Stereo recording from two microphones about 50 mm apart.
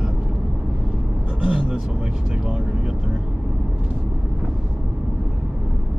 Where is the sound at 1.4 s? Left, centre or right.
Centre.